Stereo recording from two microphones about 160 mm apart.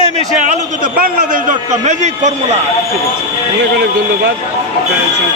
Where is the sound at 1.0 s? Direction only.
60° right (ahead or behind); by 2.6 s 45° right (ahead or behind).